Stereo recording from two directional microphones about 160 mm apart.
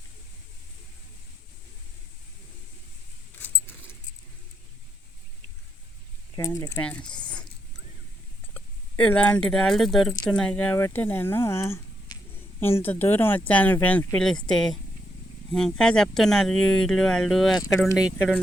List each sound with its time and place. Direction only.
6.3 s speech: 20° left (ahead or behind)
6.8 s speech: 5° left (ahead or behind)
7.2 s dog: 5° left (ahead or behind)
8.5 s speech: 10° left (ahead or behind)